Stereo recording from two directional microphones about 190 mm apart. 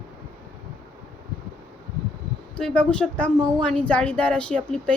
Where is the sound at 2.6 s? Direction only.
5° left (ahead or behind).